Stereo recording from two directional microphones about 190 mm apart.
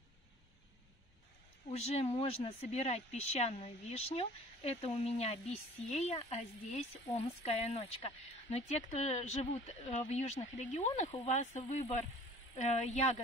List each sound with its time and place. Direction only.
1.7 s a woman's voice: 35° left (ahead or behind)